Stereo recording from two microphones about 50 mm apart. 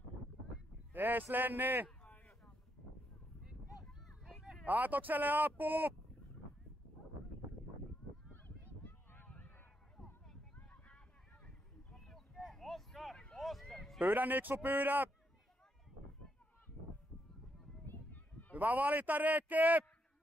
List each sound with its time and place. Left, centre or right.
0.9 s speech: right
4.6 s speech: right
8.3 s honk: left
11.9 s a sound: centre
14.0 s speech: right
17.8 s a sound: left
18.5 s speech: right